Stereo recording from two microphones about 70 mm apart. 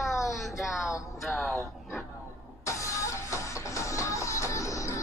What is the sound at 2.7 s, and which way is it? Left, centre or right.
Music, left.